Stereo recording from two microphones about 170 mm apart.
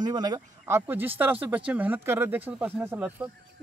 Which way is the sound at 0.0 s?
25° right (ahead or behind).